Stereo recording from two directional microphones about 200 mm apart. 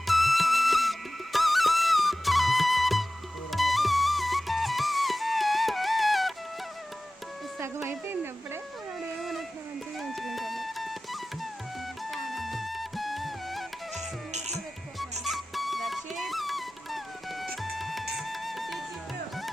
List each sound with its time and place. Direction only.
0.1 s music: centre (ahead or behind)
7.6 s a sound: 10° right (ahead or behind)
10.0 s a sound: centre (ahead or behind)
12.1 s music: centre (ahead or behind)
14.3 s music: 35° right (ahead or behind)
14.9 s music: centre (ahead or behind)